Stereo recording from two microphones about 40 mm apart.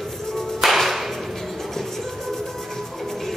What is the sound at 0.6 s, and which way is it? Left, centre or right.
Whip, centre.